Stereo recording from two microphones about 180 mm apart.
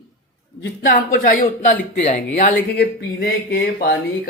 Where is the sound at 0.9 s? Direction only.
55° left (ahead or behind); by 2.2 s 40° left (ahead or behind).